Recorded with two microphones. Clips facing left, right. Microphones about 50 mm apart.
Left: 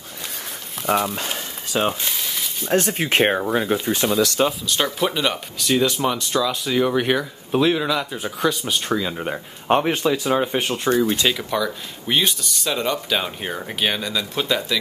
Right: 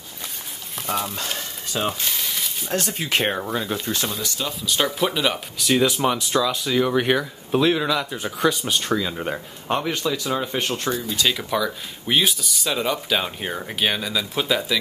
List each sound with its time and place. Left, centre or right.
0.8 s speech: centre
1.9 s a sound: centre
2.7 s speech: left
3.7 s speech: centre
4.1 s speech: left
4.5 s speech: centre
9.7 s speech: left
10.6 s speech: centre